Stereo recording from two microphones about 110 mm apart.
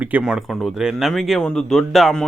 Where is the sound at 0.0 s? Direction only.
10° right (ahead or behind).